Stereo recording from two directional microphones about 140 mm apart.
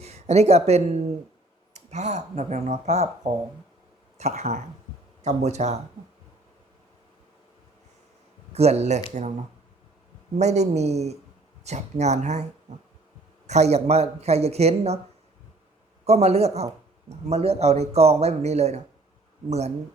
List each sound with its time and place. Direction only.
0.0 s speech: 50° right (ahead or behind)
8.5 s speech: 50° right (ahead or behind)
10.3 s speech: 55° right (ahead or behind)
13.5 s speech: 50° right (ahead or behind)
16.0 s speech: 50° right (ahead or behind)